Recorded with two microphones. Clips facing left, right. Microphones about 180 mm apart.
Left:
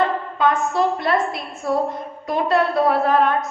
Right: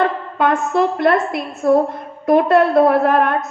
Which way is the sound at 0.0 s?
55° right (ahead or behind).